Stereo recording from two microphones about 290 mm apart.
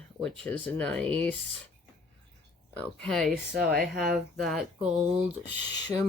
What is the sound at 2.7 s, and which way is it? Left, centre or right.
Speech, centre.